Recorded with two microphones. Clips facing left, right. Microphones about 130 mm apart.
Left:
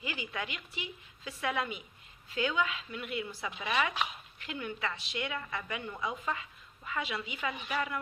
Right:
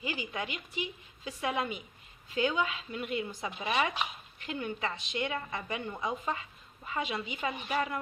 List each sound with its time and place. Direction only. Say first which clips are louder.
0.0 s a woman's voice: right 2 dB; 25° right (ahead or behind)